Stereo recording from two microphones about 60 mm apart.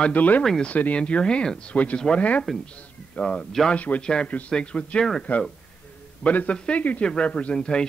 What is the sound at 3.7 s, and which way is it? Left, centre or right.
Speech, left.